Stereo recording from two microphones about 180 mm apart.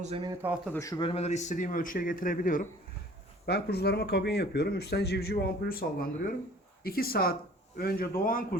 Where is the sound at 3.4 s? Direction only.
65° left (ahead or behind).